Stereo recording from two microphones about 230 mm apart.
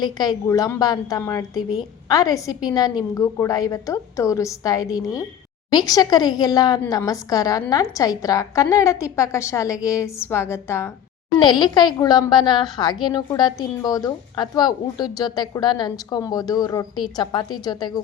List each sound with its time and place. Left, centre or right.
0.0 s a woman's voice: centre